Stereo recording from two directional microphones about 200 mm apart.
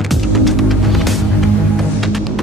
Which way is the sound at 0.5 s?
Centre (ahead or behind).